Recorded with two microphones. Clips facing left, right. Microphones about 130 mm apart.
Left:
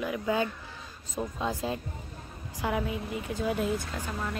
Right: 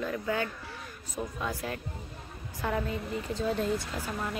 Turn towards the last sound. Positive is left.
turn(degrees=-5)  # may be behind; listen again after turning